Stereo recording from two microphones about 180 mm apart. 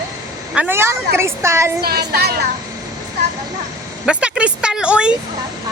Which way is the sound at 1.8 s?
60° right (ahead or behind).